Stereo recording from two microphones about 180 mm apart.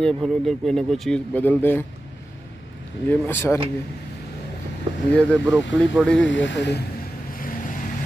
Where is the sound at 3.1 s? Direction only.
15° left (ahead or behind).